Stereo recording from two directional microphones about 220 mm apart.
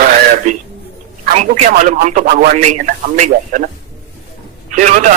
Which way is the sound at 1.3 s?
35° right (ahead or behind).